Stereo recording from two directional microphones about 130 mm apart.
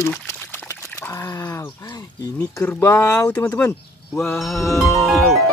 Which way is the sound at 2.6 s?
15° left (ahead or behind).